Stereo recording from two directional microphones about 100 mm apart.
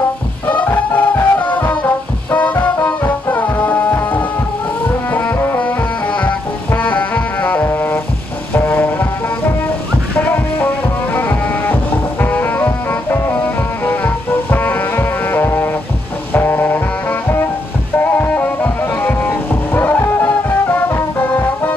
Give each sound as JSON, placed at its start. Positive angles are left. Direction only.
{"t": 0.5, "sound": "music", "side_deg": 15}
{"t": 10.1, "sound": "music", "side_deg": 20}